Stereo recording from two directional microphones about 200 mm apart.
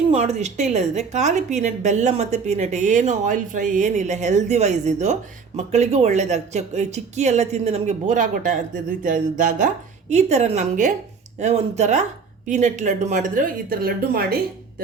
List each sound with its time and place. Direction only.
0.1 s a woman's voice: 30° right (ahead or behind); by 14.3 s 50° right (ahead or behind)